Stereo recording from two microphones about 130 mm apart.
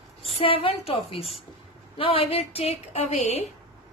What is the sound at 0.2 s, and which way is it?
A woman's voice, 45° left (ahead or behind).